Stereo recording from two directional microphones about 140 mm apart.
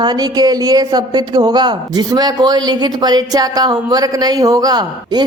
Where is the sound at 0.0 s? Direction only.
30° right (ahead or behind).